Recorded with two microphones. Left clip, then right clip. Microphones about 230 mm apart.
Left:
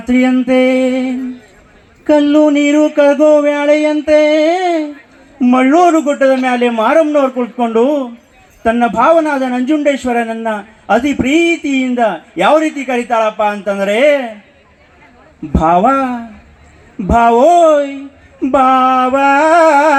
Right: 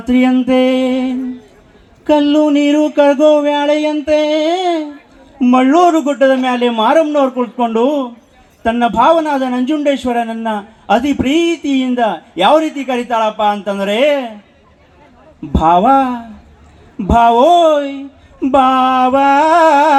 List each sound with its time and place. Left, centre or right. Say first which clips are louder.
0.1 s a man's voice: left 1 dB; left
2.3 s a man's voice: left 2 dB; left
15.5 s a man's voice: right 1 dB; left